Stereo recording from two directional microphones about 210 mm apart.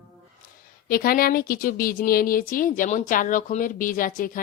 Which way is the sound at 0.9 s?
45° left (ahead or behind).